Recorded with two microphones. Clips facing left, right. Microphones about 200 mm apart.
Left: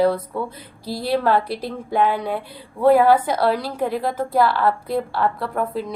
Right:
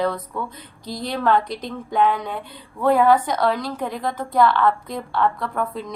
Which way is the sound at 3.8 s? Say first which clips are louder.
Left 4 dB; 5° left (ahead or behind).